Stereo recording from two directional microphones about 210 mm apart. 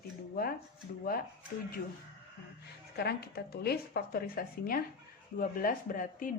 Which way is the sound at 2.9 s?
50° left (ahead or behind).